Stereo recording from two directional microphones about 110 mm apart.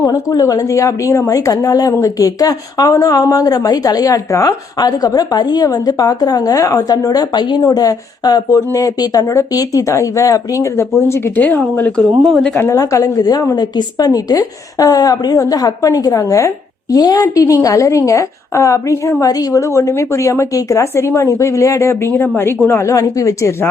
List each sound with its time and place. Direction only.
0.0 s speech: 35° left (ahead or behind)
11.1 s speech: 20° left (ahead or behind)
12.5 s a woman's voice: 20° left (ahead or behind)
12.8 s a woman's voice: 30° left (ahead or behind)